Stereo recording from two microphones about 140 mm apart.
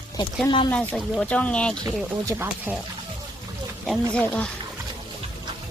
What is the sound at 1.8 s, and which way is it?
Speech, 25° right (ahead or behind).